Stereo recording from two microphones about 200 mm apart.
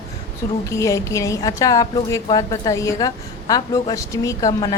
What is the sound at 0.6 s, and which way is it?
A woman's voice, 15° left (ahead or behind).